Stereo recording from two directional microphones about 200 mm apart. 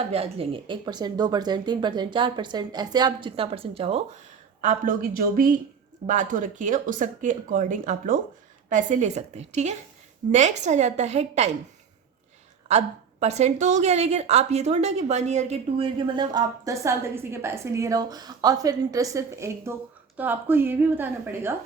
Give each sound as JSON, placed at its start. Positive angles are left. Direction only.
{"t": 0.1, "sound": "speech", "side_deg": -30}
{"t": 4.6, "sound": "a woman's voice", "side_deg": -45}
{"t": 12.6, "sound": "a woman's voice", "side_deg": -35}